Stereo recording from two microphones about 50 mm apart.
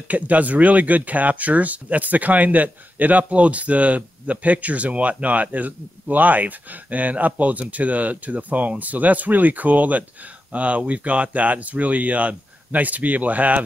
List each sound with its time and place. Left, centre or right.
0.1 s speech: right